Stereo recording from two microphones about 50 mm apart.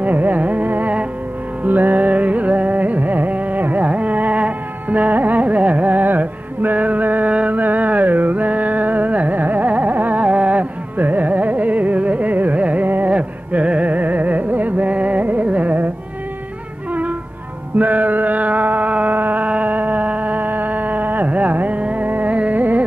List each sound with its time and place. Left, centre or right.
0.0 s carnatic music: right
1.6 s music: right
10.2 s carnatic music: right
12.8 s music: right
13.1 s music: right
17.7 s a sound: right